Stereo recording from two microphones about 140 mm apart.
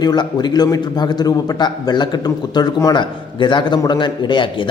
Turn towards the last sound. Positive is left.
turn(degrees=35)  # may be behind; listen again after turning